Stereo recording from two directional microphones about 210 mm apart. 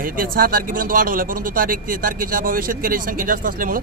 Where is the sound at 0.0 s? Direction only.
40° right (ahead or behind).